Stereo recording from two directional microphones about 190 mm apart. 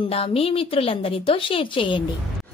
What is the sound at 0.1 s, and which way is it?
A woman's voice, 30° left (ahead or behind).